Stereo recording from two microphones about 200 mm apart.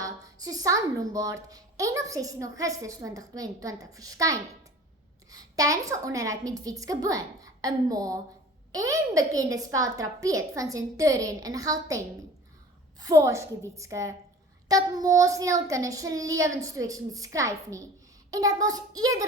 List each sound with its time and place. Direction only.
0.0 s a child's voice: 20° right (ahead or behind)